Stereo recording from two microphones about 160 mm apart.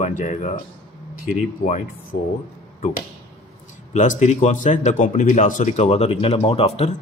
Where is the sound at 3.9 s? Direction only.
50° left (ahead or behind).